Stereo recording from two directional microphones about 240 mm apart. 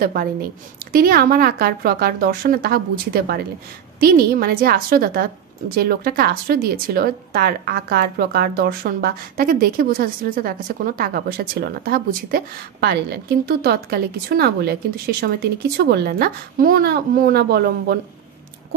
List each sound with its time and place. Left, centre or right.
0.0 s speech: right